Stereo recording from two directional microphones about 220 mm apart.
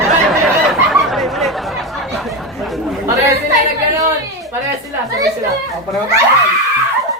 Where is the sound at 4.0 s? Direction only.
15° right (ahead or behind).